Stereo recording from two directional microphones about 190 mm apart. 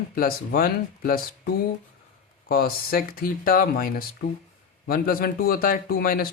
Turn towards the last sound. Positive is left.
turn(degrees=50)  # may be behind; listen again after turning